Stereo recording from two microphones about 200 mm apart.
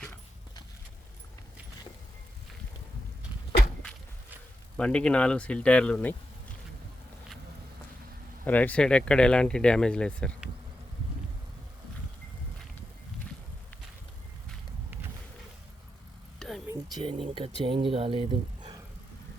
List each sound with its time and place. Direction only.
4.8 s speech: 5° left (ahead or behind)
8.4 s speech: 10° left (ahead or behind)
16.6 s speech: 20° right (ahead or behind)